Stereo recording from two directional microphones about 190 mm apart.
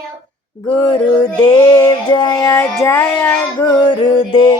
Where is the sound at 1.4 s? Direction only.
20° left (ahead or behind).